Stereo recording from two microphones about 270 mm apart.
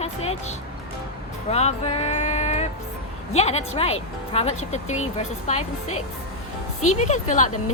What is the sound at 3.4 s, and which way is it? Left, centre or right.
Speech, left.